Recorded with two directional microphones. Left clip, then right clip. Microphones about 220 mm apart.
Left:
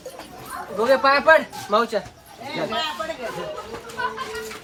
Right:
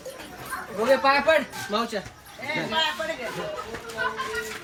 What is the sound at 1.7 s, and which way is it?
Speech, 5° right (ahead or behind).